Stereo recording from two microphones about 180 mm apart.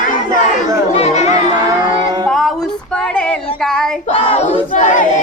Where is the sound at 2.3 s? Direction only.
Centre (ahead or behind).